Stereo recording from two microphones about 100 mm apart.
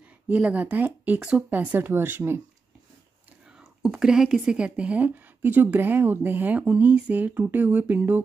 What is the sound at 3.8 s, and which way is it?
A woman's voice, 5° right (ahead or behind).